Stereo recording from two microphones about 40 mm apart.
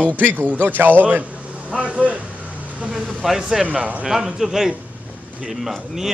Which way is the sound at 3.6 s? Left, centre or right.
Right.